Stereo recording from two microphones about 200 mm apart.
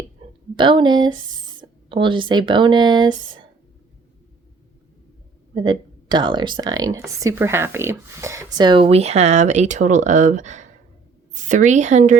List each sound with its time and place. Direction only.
0.5 s speech: 25° right (ahead or behind)
5.5 s a woman's voice: 25° right (ahead or behind)